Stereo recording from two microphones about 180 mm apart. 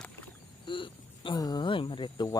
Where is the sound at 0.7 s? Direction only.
25° left (ahead or behind).